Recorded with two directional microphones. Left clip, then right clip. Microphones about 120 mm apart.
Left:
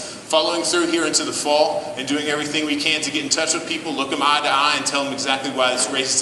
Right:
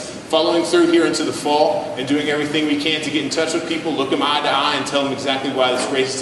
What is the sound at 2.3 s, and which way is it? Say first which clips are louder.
Speech: right 2 dB; 25° left (ahead or behind).